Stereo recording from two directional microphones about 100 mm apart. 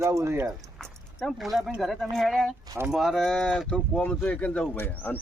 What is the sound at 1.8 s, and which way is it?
A man's voice, centre (ahead or behind).